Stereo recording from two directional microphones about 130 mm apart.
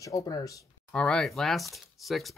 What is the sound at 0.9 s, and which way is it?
Speech, 5° left (ahead or behind).